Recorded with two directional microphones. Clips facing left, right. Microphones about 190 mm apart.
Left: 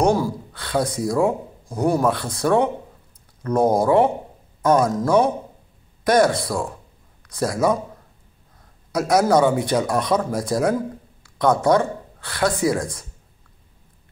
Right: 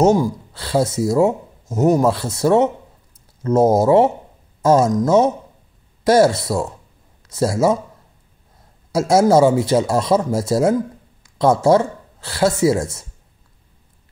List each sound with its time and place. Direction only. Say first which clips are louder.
0.0 s speech: right 4 dB; 20° right (ahead or behind)
8.9 s speech: right 4 dB; 25° right (ahead or behind)